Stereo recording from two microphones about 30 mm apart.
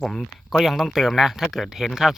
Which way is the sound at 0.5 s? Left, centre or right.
Centre.